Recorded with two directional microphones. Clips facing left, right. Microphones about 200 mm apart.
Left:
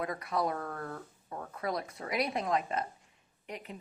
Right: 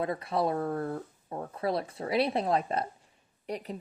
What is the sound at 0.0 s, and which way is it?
A woman's voice, 30° right (ahead or behind).